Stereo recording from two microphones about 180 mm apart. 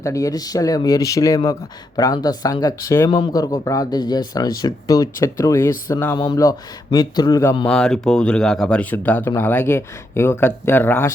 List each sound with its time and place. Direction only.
0.0 s speech: 20° left (ahead or behind)
7.7 s speech: 5° left (ahead or behind)